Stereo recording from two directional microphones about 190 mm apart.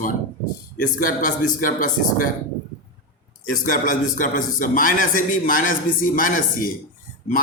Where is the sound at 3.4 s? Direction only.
45° left (ahead or behind).